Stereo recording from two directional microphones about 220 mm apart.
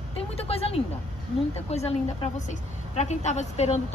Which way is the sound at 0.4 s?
25° left (ahead or behind).